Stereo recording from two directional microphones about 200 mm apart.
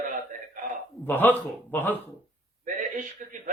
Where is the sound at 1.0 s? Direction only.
10° left (ahead or behind).